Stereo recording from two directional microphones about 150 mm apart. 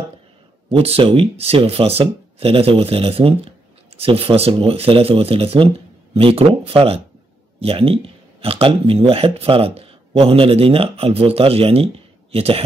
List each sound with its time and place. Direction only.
0.7 s speech: 40° right (ahead or behind)